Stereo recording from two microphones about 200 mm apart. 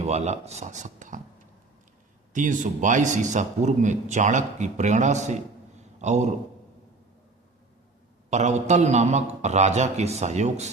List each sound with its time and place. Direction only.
0.0 s a man's voice: 35° right (ahead or behind)
2.3 s a man's voice: 40° right (ahead or behind)
8.3 s a man's voice: 35° right (ahead or behind)